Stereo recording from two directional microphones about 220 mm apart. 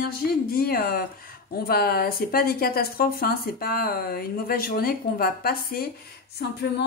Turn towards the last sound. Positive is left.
turn(degrees=50)  # may be behind; listen again after turning